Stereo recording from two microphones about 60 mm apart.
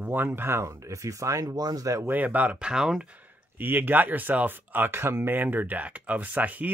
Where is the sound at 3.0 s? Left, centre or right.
Right.